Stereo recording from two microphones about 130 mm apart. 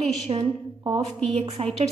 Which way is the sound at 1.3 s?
50° right (ahead or behind).